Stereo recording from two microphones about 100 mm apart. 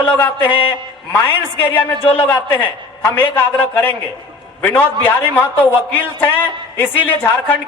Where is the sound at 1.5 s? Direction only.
20° left (ahead or behind).